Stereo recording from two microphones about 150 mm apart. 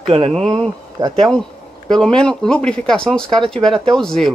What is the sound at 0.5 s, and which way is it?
Speech, 25° right (ahead or behind).